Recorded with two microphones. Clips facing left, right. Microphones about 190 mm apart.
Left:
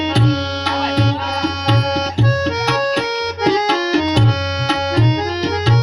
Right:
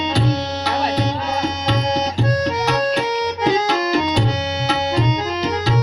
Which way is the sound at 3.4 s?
80° left.